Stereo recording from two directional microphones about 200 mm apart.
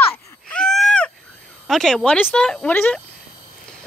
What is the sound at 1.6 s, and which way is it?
Speech, centre (ahead or behind).